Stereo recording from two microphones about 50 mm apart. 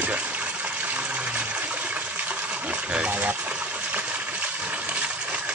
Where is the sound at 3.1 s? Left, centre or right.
Right.